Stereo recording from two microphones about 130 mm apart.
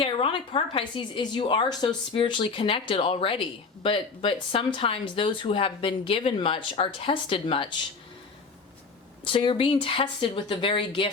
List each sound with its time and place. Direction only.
0.0 s a woman's voice: 45° left (ahead or behind)
9.2 s speech: 45° left (ahead or behind)